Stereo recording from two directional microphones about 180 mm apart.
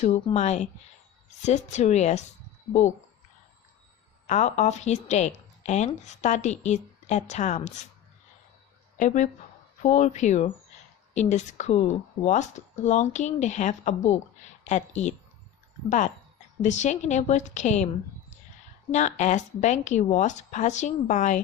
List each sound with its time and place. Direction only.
0.3 s speech: 40° left (ahead or behind)
4.3 s speech: 40° left (ahead or behind)
9.0 s a woman's voice: 40° left (ahead or behind)
18.9 s speech: 40° left (ahead or behind)